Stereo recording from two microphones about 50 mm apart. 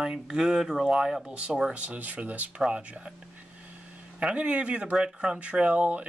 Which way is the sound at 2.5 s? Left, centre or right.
Centre.